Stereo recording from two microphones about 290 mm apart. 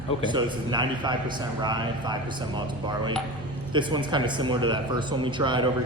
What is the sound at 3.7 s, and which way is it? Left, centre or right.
A man's voice, centre.